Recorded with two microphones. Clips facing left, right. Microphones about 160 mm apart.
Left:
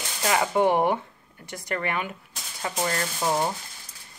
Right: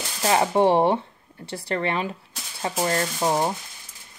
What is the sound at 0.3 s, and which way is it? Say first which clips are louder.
Speech: right 3 dB; 30° right (ahead or behind).